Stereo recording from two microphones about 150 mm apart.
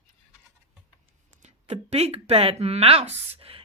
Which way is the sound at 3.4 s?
40° right (ahead or behind).